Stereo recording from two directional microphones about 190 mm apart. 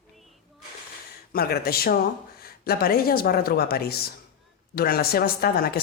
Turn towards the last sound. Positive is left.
turn(degrees=50)  # may be behind; listen again after turning